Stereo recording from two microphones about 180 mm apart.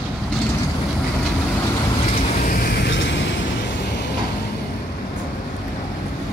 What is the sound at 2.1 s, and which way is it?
Vehicle, 45° left (ahead or behind).